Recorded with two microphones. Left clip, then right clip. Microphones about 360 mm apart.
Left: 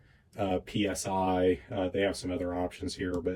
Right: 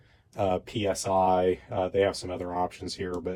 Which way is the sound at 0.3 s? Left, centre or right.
Centre.